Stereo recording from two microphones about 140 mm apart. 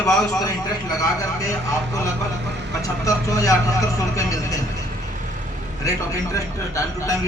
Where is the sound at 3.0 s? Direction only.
25° left (ahead or behind).